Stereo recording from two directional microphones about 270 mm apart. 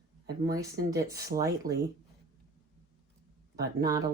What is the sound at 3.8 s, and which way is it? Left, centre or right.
Speech, centre.